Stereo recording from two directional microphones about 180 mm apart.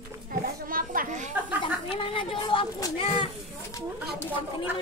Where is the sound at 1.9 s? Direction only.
30° left (ahead or behind).